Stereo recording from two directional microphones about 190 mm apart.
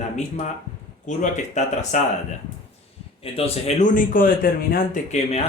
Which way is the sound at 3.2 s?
30° left (ahead or behind).